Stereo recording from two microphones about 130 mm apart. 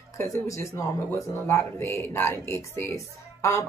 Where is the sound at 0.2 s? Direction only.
20° left (ahead or behind).